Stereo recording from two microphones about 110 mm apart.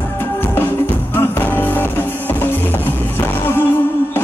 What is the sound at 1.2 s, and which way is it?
Music, 20° left (ahead or behind).